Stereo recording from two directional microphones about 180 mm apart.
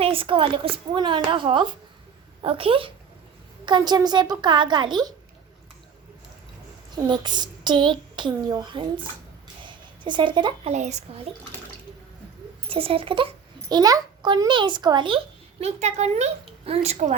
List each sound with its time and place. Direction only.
0.0 s a child's voice: 30° right (ahead or behind)
6.9 s a child's voice: 25° right (ahead or behind)
10.7 s a woman's voice: 40° right (ahead or behind)
12.6 s a child's voice: 30° right (ahead or behind)
15.6 s a woman's voice: 40° right (ahead or behind)